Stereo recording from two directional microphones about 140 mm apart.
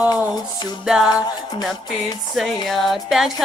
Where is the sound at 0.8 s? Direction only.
5° right (ahead or behind).